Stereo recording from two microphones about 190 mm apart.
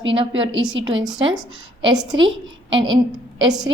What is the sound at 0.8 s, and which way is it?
Speech, 75° right (ahead or behind).